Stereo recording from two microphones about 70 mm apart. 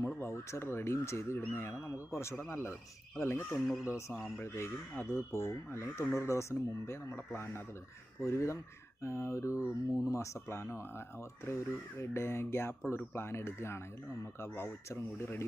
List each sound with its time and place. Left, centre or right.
0.2 s speech: left
1.4 s speech: left
3.4 s speech: centre
4.4 s speech: left